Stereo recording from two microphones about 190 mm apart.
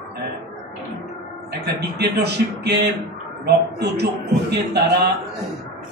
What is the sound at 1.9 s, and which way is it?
A man's voice, 60° right (ahead or behind).